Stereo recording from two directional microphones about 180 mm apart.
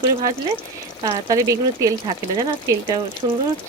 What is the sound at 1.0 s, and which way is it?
Speech, 20° right (ahead or behind).